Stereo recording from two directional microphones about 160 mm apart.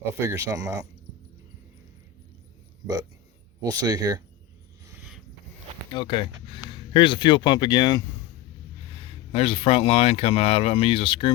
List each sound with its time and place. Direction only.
0.1 s speech: 15° right (ahead or behind)
3.6 s speech: 20° right (ahead or behind)
5.9 s speech: 30° left (ahead or behind)